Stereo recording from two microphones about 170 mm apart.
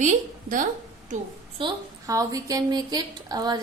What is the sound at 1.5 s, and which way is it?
A woman's voice, 25° right (ahead or behind).